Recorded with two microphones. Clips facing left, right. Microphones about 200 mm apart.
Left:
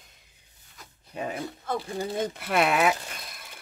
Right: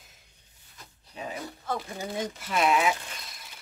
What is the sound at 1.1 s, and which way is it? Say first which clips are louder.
Speech: left 4 dB; 55° left (ahead or behind).